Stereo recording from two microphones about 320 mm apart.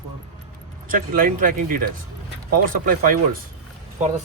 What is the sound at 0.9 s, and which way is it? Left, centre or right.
Speech, right.